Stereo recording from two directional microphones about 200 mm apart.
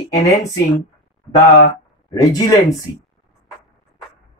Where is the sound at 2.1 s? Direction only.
15° left (ahead or behind).